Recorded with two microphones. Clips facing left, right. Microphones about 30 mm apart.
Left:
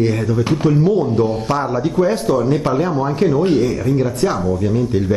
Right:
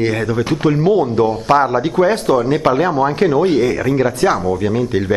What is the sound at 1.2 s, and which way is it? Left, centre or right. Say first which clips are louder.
A man's voice: right 5 dB; right.